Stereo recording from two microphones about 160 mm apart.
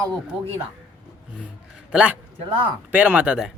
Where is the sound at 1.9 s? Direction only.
5° right (ahead or behind).